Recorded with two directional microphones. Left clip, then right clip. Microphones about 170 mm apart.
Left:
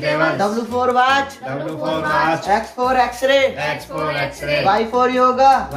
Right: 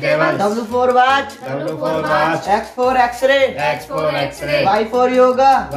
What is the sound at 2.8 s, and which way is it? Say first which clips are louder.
Speech: right 4 dB; 15° left (ahead or behind).